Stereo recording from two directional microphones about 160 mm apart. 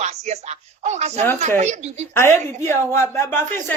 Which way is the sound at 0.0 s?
45° right (ahead or behind).